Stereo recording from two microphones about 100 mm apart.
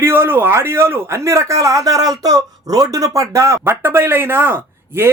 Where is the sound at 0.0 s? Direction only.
25° right (ahead or behind).